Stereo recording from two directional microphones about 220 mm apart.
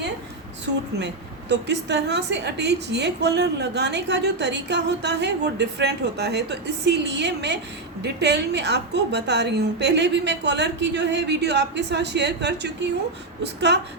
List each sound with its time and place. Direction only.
0.9 s a woman's voice: 50° right (ahead or behind)